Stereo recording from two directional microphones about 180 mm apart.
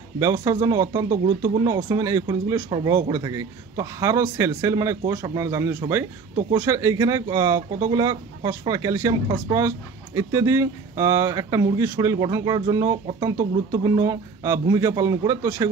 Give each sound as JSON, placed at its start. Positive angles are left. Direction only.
{"t": 0.2, "sound": "a man's voice", "side_deg": -15}